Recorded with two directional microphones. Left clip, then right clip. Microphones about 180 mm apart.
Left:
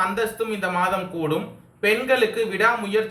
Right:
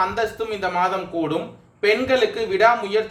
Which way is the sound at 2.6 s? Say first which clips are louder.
Right 4 dB; 40° right (ahead or behind).